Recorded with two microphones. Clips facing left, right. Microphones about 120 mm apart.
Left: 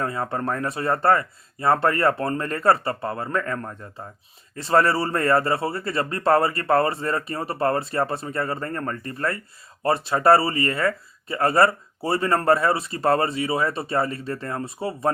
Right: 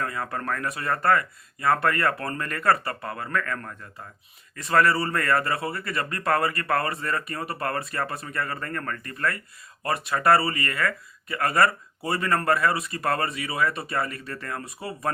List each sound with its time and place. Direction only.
0.0 s speech: 30° left (ahead or behind)